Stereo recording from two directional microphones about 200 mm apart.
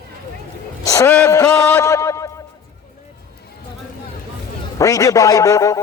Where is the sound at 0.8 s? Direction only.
15° left (ahead or behind).